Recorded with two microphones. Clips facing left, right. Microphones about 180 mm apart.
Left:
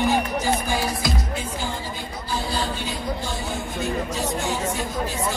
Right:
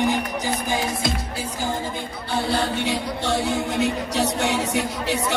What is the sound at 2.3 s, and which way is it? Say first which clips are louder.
Music: right 4 dB; 65° right (ahead or behind).